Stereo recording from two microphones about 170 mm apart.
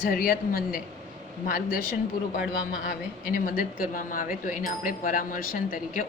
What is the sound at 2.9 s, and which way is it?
A woman's voice, 55° left (ahead or behind).